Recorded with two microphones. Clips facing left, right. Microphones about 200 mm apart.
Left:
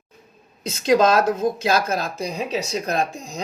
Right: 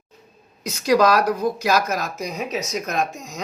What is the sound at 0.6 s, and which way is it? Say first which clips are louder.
Speech: even; 25° left (ahead or behind).